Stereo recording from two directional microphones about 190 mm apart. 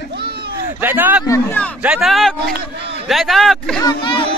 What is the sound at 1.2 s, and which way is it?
Speech, 15° left (ahead or behind).